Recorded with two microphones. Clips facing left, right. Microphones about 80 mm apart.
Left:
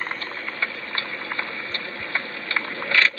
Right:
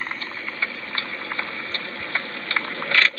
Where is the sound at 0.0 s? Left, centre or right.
Left; by 3.1 s centre.